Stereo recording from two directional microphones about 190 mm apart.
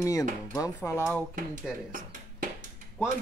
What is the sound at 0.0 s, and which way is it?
Speech, 20° left (ahead or behind).